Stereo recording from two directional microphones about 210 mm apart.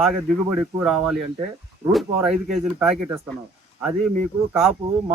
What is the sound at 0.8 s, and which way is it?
Speech, centre (ahead or behind).